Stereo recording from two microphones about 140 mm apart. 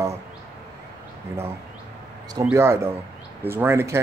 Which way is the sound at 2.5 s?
20° right (ahead or behind).